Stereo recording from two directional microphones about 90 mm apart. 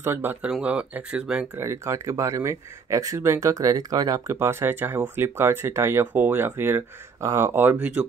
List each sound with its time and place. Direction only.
0.0 s speech: 25° right (ahead or behind)
0.5 s speech: 10° right (ahead or behind)
1.6 s speech: 30° right (ahead or behind)
4.4 s speech: 30° right (ahead or behind)